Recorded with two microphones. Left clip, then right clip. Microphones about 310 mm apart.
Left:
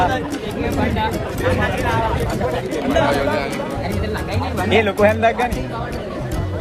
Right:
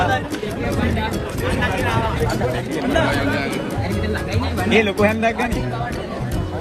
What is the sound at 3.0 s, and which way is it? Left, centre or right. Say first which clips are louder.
Speech: left 2 dB; left.